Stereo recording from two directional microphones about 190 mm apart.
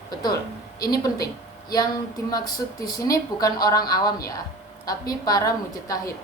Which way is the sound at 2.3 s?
20° left (ahead or behind).